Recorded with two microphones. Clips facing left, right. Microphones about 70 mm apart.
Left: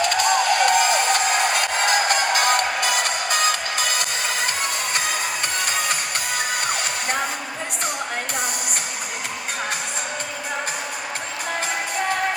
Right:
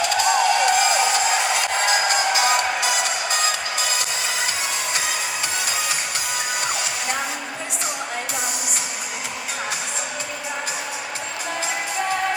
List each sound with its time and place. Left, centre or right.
0.0 s music: left